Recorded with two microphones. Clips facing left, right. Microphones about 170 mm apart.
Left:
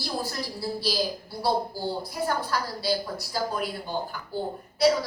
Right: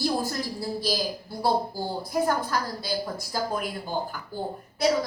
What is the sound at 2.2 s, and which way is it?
A woman's voice, 50° right (ahead or behind).